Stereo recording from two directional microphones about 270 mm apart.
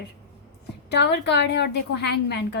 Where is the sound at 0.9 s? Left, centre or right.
Left.